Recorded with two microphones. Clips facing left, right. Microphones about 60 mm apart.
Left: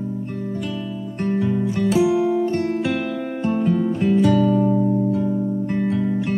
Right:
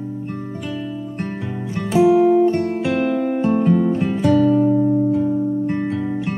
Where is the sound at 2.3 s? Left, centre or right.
Centre.